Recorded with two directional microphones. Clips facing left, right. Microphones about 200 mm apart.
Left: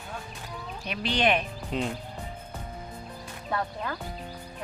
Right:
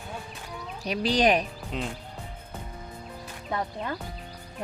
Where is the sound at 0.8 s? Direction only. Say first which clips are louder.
Right 3 dB; 35° right (ahead or behind).